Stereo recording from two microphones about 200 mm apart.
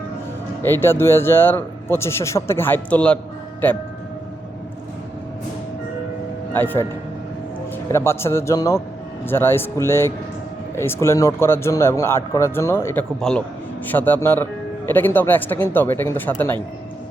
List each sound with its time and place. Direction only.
0.6 s a man's voice: 10° left (ahead or behind)
6.5 s speech: 10° left (ahead or behind)
7.9 s a man's voice: 10° left (ahead or behind)